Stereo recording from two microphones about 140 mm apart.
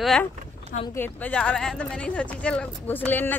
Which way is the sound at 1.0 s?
10° left (ahead or behind).